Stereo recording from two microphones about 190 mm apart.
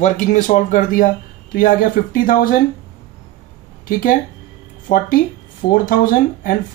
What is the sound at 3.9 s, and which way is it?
Speech, 45° left (ahead or behind).